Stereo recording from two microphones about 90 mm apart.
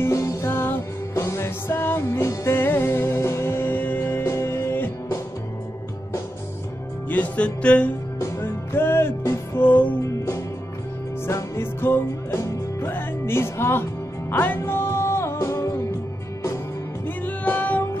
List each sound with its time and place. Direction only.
0.0 s music: 30° left (ahead or behind)
7.1 s music: 15° left (ahead or behind)
8.2 s music: 25° left (ahead or behind)
17.2 s music: 20° left (ahead or behind)